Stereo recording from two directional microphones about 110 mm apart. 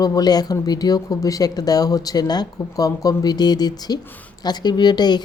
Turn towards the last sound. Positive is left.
turn(degrees=40)  # may be behind; listen again after turning